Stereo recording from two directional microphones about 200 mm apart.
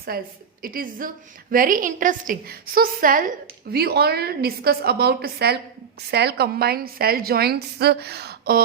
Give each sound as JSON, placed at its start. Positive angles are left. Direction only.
{"t": 0.1, "sound": "a woman's voice", "side_deg": -50}